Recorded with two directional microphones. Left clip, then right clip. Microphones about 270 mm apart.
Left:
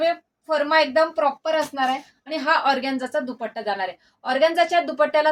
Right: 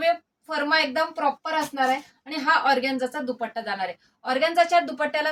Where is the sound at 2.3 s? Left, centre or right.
Centre.